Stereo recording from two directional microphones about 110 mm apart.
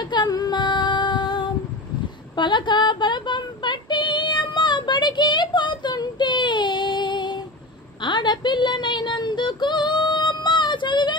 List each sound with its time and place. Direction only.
0.1 s female singing: 40° left (ahead or behind)